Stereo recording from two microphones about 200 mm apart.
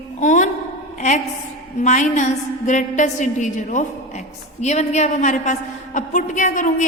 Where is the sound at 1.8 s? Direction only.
35° left (ahead or behind).